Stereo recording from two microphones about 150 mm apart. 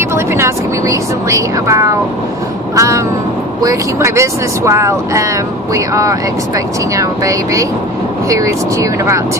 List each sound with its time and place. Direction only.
0.1 s vehicle: 15° right (ahead or behind)
2.7 s crow: 20° right (ahead or behind)
3.6 s speech: 20° right (ahead or behind)